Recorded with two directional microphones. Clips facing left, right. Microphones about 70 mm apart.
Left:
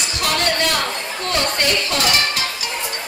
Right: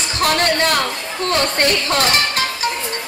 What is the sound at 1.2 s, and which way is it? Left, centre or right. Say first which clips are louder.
Speech: right 4 dB; right.